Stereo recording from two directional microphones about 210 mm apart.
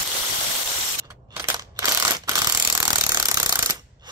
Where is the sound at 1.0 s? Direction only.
15° right (ahead or behind).